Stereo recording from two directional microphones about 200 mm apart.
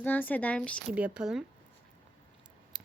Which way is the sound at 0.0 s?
10° left (ahead or behind).